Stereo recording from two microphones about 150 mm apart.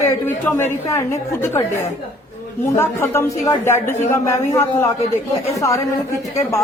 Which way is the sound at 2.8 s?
15° left (ahead or behind).